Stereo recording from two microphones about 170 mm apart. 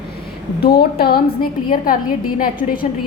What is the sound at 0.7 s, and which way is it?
A woman's voice, 65° left (ahead or behind).